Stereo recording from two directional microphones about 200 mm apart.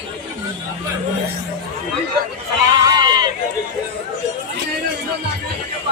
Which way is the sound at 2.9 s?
20° right (ahead or behind).